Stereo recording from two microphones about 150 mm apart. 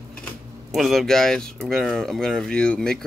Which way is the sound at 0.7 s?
Centre (ahead or behind).